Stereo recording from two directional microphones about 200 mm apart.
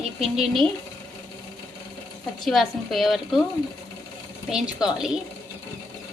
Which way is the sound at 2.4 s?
Centre (ahead or behind).